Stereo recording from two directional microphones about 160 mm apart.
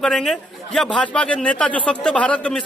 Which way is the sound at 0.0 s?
Centre (ahead or behind).